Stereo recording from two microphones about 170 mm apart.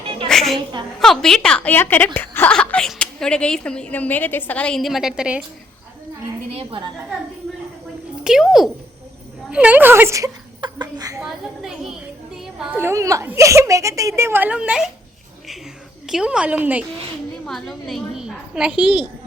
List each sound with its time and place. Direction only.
0.0 s a sound: 30° right (ahead or behind)
0.3 s a woman's voice: centre (ahead or behind)
6.5 s a woman's voice: 35° right (ahead or behind)
8.2 s a woman's voice: centre (ahead or behind); by 11.2 s 20° right (ahead or behind)
12.5 s a woman's voice: 10° right (ahead or behind)
16.0 s a woman's voice: 5° right (ahead or behind)
17.4 s a woman's voice: centre (ahead or behind)